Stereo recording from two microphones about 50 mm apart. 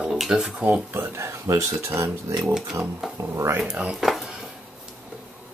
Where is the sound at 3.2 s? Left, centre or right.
Right.